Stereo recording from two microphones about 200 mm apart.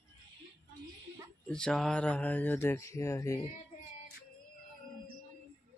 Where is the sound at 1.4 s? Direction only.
5° left (ahead or behind).